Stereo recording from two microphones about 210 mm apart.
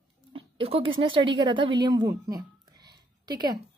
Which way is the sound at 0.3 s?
25° right (ahead or behind).